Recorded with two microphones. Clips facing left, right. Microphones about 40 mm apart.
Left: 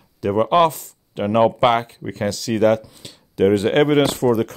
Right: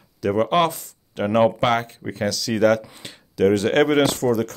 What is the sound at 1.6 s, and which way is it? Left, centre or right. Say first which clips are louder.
Speech: left 4 dB; left.